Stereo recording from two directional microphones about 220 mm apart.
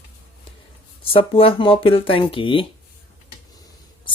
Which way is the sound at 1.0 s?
25° left (ahead or behind).